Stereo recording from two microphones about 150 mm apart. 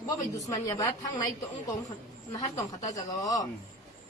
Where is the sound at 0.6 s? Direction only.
25° left (ahead or behind).